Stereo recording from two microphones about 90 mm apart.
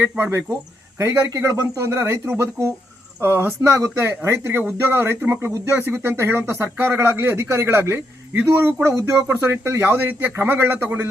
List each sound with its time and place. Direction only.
0.2 s speech: 25° right (ahead or behind)
9.3 s speech: 20° right (ahead or behind)